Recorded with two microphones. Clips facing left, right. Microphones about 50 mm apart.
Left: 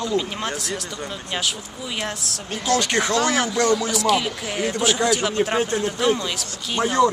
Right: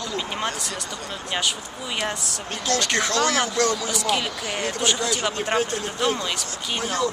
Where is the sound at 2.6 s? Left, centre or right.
Centre.